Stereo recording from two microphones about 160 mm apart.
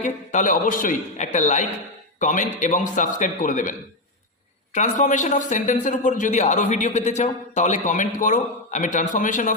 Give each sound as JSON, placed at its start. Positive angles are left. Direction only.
{"t": 0.0, "sound": "a man's voice", "side_deg": 50}